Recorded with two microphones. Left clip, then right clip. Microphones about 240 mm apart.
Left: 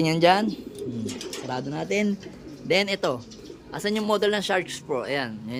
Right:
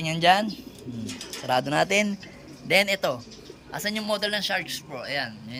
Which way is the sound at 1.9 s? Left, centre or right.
Centre.